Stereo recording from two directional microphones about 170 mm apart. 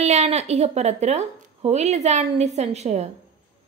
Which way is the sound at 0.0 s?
40° right (ahead or behind).